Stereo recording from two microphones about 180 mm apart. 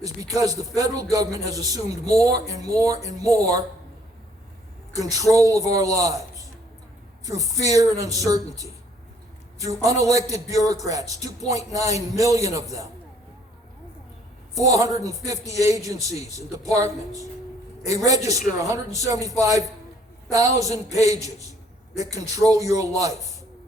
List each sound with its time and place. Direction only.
0.0 s a man's voice: 20° right (ahead or behind)
4.9 s a man's voice: 20° right (ahead or behind)
7.3 s a man's voice: 20° right (ahead or behind)
14.6 s a man's voice: 15° right (ahead or behind)